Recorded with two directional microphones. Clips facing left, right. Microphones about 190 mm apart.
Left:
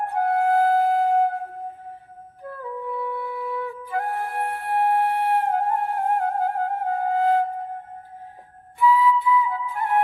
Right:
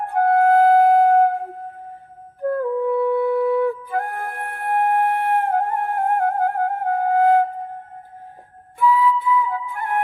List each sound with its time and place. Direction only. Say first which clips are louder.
0.1 s flute: right 6 dB; 55° right (ahead or behind)
3.0 s flute: right 11 dB; 50° right (ahead or behind)
8.9 s flute: right 1 dB; 50° right (ahead or behind)